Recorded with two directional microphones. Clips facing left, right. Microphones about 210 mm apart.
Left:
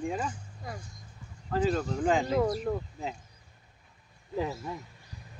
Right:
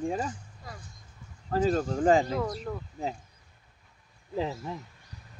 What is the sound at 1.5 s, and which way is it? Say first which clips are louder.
Speech: right 2 dB; 40° right (ahead or behind).